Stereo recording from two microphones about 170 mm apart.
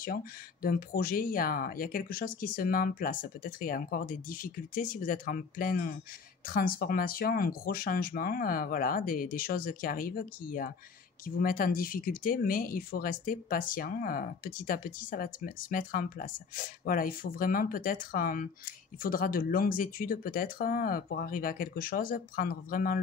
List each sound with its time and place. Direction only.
0.0 s speech: 60° left (ahead or behind)